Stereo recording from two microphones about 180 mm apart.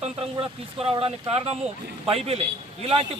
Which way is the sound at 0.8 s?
30° right (ahead or behind).